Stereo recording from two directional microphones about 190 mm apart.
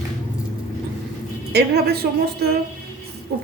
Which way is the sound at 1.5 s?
60° right (ahead or behind).